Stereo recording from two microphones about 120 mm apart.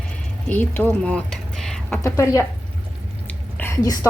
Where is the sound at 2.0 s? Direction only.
25° left (ahead or behind).